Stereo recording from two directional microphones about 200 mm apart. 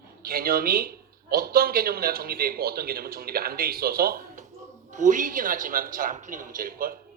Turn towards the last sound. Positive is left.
turn(degrees=-45)  # may be behind; listen again after turning